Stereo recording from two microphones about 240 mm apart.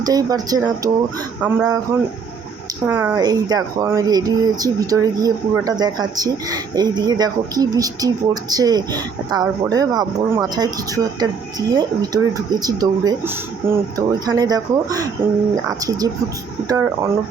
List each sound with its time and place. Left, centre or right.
0.0 s speech: centre
2.8 s speech: centre
16.6 s speech: centre